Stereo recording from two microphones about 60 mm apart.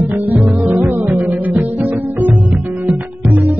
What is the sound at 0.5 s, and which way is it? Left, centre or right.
Music, right.